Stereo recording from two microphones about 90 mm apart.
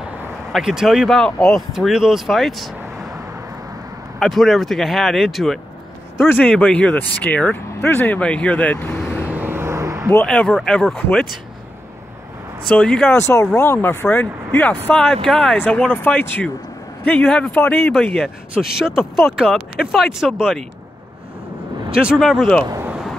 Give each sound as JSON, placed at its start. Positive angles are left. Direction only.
{"t": 0.5, "sound": "speech", "side_deg": -5}
{"t": 4.2, "sound": "speech", "side_deg": 0}
{"t": 6.1, "sound": "speech", "side_deg": 20}
{"t": 9.2, "sound": "vehicle", "side_deg": -20}
{"t": 10.2, "sound": "speech", "side_deg": 10}
{"t": 12.6, "sound": "speech", "side_deg": 10}
{"t": 13.1, "sound": "speech", "side_deg": 35}
{"t": 14.0, "sound": "speech", "side_deg": 15}
{"t": 15.5, "sound": "speech", "side_deg": 20}
{"t": 18.5, "sound": "speech", "side_deg": -5}
{"t": 21.9, "sound": "speech", "side_deg": -5}